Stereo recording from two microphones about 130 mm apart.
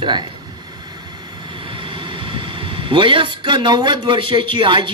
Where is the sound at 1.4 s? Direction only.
40° right (ahead or behind).